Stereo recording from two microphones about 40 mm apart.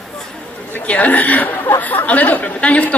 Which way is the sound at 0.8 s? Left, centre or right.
Left.